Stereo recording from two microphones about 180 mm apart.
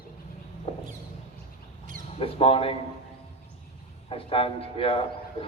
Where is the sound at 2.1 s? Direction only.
30° left (ahead or behind).